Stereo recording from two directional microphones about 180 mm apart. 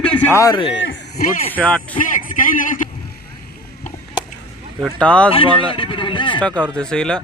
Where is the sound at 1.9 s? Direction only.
45° left (ahead or behind).